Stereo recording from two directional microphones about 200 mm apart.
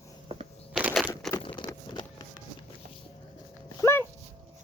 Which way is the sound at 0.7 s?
Centre (ahead or behind).